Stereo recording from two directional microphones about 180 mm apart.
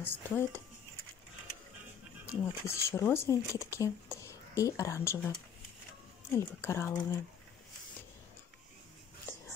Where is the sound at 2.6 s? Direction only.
15° left (ahead or behind).